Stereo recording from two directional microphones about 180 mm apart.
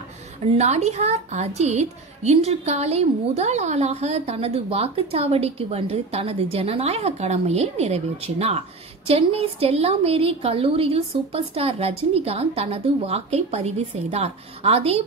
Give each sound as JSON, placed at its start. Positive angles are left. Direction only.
{"t": 0.6, "sound": "a woman's voice", "side_deg": -40}